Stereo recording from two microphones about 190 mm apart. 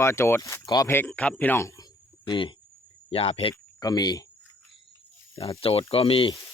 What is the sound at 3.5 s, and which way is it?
Speech, 20° left (ahead or behind).